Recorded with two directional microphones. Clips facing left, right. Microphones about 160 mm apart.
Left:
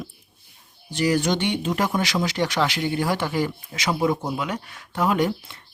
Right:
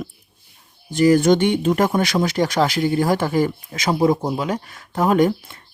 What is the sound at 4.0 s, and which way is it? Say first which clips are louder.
Speech: right 6 dB; 35° right (ahead or behind).